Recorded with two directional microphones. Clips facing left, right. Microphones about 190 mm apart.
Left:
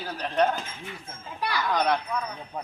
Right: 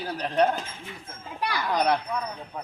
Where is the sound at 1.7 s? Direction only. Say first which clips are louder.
Right 1 dB; 10° right (ahead or behind).